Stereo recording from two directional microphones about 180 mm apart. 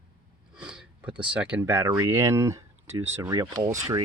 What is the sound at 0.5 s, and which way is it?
Speech, 5° right (ahead or behind).